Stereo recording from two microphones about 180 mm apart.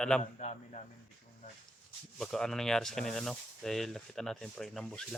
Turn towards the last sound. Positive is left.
turn(degrees=0)  # may be behind; listen again after turning